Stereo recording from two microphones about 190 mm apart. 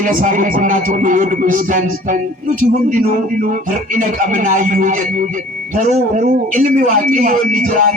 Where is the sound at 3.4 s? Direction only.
45° right (ahead or behind).